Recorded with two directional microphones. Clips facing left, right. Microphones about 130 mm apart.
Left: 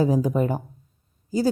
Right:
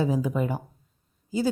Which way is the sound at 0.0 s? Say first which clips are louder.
Left 4 dB; 40° left (ahead or behind).